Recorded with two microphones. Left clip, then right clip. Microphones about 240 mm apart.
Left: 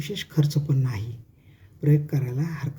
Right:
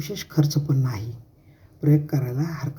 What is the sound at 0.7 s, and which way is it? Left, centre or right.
Speech, centre.